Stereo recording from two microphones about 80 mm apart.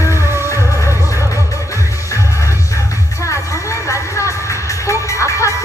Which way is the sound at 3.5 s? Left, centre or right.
Left.